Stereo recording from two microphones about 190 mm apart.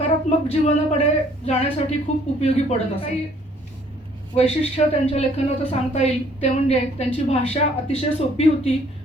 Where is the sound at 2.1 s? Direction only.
35° left (ahead or behind).